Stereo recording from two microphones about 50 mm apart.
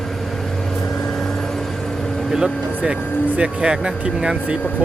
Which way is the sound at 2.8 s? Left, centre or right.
Right.